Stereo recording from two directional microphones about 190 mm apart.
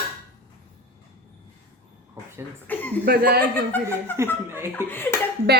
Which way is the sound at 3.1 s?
55° right (ahead or behind).